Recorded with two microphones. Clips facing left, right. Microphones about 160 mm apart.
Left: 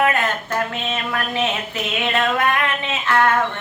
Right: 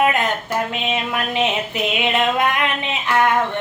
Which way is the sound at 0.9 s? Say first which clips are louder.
Right 2 dB; 15° right (ahead or behind).